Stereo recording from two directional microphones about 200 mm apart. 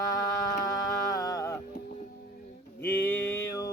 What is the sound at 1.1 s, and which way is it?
Music, 20° left (ahead or behind).